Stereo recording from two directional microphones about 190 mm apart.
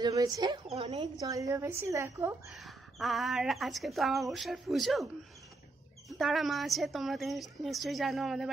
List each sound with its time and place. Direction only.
0.0 s a woman's voice: 20° right (ahead or behind)
0.7 s speech: 35° right (ahead or behind)
1.2 s a woman's voice: 15° right (ahead or behind)
2.5 s a woman's voice: centre (ahead or behind)
6.0 s a woman's voice: centre (ahead or behind)